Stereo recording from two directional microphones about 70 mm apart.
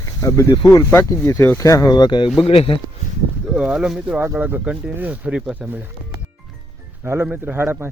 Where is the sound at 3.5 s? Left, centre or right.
Centre.